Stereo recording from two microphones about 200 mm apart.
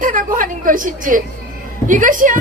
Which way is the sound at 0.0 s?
40° right (ahead or behind).